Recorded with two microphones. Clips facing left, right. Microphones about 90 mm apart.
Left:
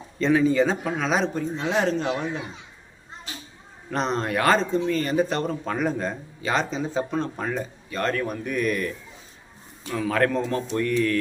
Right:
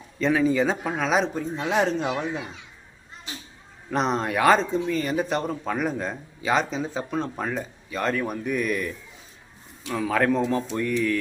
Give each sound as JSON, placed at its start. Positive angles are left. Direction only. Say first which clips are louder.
{"t": 0.2, "sound": "speech", "louder": "left 2 dB", "side_deg": -5}
{"t": 3.8, "sound": "speech", "louder": "right 1 dB", "side_deg": -10}
{"t": 9.9, "sound": "speech", "louder": "even", "side_deg": -5}